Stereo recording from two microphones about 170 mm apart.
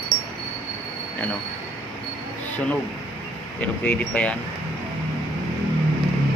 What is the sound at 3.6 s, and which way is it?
Speech, 10° left (ahead or behind).